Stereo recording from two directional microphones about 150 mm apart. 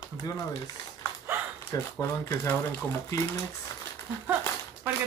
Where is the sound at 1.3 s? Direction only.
15° right (ahead or behind).